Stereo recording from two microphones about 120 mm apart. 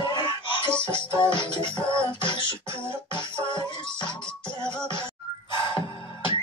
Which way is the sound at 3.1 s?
40° left (ahead or behind).